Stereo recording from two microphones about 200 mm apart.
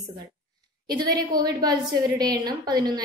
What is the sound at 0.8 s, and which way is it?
A woman's voice, 20° right (ahead or behind).